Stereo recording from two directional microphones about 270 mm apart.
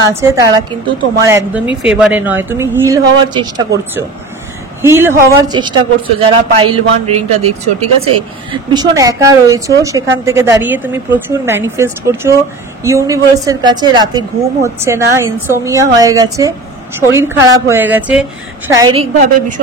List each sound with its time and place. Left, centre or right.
0.0 s a woman's voice: centre
4.8 s a woman's voice: centre
18.7 s a woman's voice: centre
19.1 s speech: right